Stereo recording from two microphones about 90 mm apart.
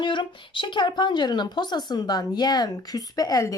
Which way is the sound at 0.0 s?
65° left (ahead or behind).